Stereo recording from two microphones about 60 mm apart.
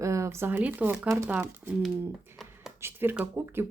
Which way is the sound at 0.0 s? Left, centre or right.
Right.